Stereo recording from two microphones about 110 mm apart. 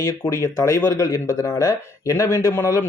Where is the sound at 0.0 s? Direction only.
30° left (ahead or behind).